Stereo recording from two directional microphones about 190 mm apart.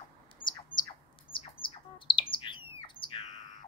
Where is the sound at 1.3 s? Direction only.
25° left (ahead or behind).